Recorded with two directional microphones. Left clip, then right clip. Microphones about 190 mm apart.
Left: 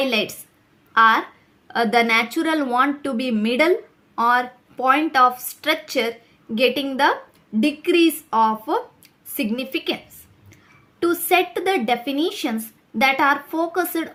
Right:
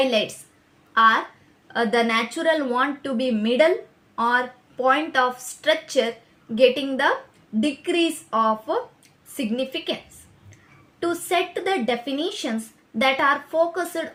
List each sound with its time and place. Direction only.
0.0 s a woman's voice: 40° left (ahead or behind)
11.0 s speech: 45° left (ahead or behind)